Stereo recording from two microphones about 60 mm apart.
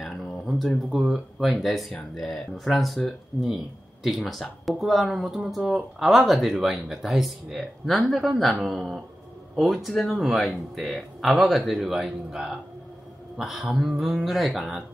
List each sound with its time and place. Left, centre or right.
0.5 s speech: centre